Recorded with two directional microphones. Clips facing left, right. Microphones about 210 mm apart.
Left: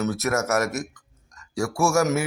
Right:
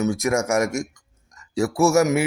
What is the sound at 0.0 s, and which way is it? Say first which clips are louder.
A man's voice: right 3 dB; 15° right (ahead or behind).